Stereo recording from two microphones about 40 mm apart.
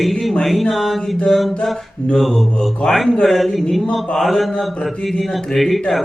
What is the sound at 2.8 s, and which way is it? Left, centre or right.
Speech, left.